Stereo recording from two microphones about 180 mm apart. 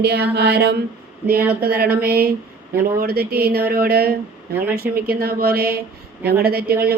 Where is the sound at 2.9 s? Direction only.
60° right (ahead or behind).